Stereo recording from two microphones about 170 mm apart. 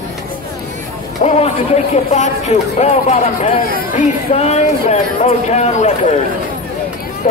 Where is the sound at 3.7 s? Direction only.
60° left (ahead or behind).